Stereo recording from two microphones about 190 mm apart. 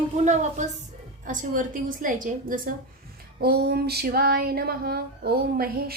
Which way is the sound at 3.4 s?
60° right (ahead or behind).